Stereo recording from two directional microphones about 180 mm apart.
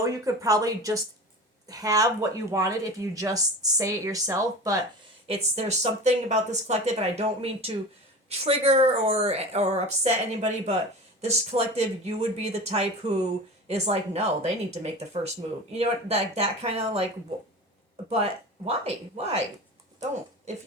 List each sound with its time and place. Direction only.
0.0 s speech: 20° right (ahead or behind)
5.3 s a woman's voice: 35° right (ahead or behind)
18.1 s a woman's voice: 35° right (ahead or behind)